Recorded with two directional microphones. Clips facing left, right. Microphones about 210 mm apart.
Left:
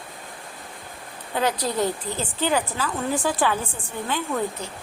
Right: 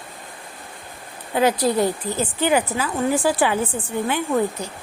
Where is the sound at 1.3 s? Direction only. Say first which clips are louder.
Right 6 dB; 10° right (ahead or behind).